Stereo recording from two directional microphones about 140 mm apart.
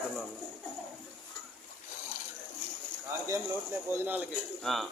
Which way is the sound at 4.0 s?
15° right (ahead or behind).